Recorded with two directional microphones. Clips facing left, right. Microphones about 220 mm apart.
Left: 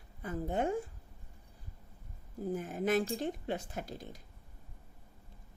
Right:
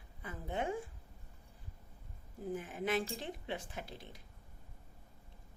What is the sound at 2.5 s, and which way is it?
Speech, 40° left (ahead or behind).